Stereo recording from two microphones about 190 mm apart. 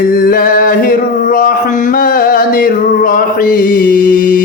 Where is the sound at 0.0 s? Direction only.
50° left (ahead or behind).